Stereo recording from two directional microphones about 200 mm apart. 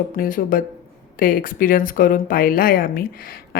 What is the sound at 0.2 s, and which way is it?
Speech, 45° left (ahead or behind).